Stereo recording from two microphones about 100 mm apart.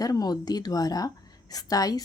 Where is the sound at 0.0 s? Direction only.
40° left (ahead or behind).